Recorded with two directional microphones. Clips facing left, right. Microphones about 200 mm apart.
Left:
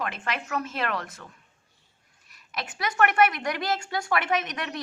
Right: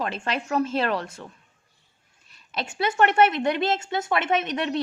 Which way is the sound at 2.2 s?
30° right (ahead or behind).